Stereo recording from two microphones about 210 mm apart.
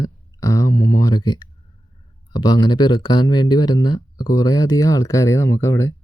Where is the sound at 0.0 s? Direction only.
15° left (ahead or behind).